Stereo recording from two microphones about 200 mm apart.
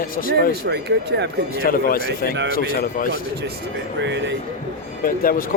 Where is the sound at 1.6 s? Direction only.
45° left (ahead or behind).